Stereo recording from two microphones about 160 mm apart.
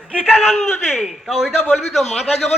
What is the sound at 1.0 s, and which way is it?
A man's voice, 5° right (ahead or behind).